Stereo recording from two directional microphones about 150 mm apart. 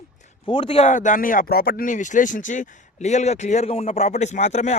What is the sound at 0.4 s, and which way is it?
Speech, 35° left (ahead or behind).